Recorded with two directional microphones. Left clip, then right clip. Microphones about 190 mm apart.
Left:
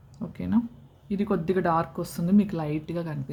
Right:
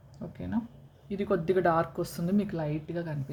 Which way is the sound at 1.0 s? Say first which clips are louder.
Left 1 dB; 10° left (ahead or behind).